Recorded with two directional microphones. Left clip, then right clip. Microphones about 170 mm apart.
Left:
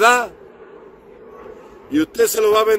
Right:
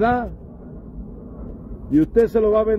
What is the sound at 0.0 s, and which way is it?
Speech, 20° left (ahead or behind).